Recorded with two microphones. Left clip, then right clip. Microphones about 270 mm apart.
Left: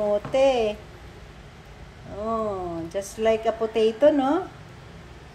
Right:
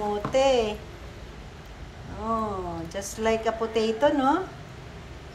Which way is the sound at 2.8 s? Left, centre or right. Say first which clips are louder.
Left 4 dB; centre.